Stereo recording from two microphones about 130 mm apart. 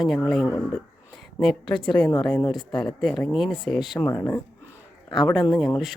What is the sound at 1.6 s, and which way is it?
Speech, 40° left (ahead or behind).